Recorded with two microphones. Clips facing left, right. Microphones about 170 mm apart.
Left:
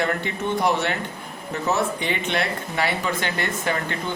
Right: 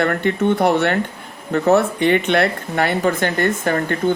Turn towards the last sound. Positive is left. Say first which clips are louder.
# right 7 dB
turn(degrees=-45)  # may be behind; listen again after turning